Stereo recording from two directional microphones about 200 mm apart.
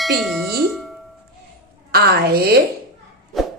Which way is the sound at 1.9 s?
50° right (ahead or behind).